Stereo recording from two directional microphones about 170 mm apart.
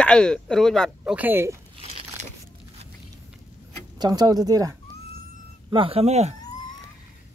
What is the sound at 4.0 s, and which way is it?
Speech, 25° right (ahead or behind).